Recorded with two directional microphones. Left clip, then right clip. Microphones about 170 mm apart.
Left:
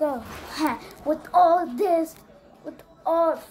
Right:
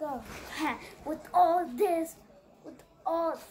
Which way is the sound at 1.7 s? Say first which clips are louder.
Left 6 dB; 30° left (ahead or behind).